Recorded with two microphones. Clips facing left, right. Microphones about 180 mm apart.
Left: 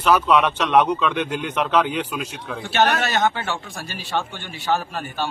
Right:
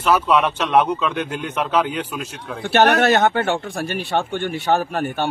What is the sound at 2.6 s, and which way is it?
Speech, 60° right (ahead or behind).